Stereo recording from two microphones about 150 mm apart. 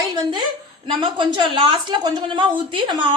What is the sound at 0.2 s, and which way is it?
A woman's voice, 30° right (ahead or behind).